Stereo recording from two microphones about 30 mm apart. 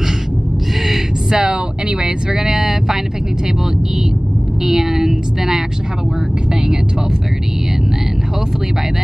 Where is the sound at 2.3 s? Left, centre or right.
Centre.